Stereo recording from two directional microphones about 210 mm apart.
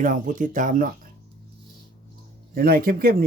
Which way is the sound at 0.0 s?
40° right (ahead or behind).